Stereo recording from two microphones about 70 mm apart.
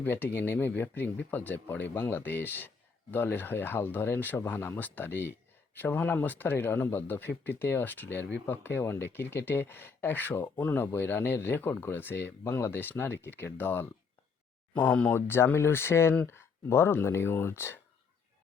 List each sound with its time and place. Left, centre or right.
0.0 s speech: left
15.1 s speech: left